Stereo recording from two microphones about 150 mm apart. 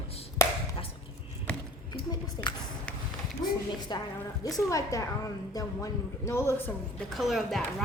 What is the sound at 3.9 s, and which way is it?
A woman's voice, 25° left (ahead or behind).